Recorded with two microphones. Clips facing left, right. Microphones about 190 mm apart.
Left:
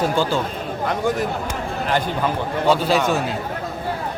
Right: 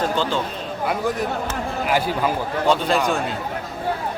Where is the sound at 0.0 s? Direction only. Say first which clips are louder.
Left 2 dB; 10° left (ahead or behind); by 2.3 s 5° right (ahead or behind).